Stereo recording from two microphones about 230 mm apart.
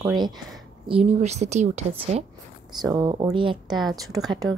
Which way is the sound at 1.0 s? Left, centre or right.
Right.